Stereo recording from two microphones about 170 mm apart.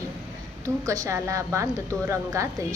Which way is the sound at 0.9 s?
20° right (ahead or behind).